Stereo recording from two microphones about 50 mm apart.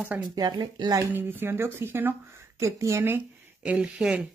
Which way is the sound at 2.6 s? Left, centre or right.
Right.